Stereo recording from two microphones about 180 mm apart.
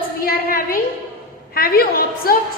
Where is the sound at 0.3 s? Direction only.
55° left (ahead or behind).